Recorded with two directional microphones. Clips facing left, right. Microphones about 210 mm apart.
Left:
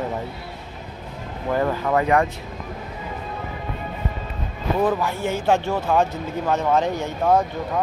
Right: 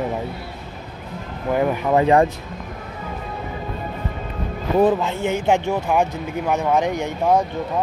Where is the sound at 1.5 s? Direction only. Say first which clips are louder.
Right 2 dB; 15° right (ahead or behind).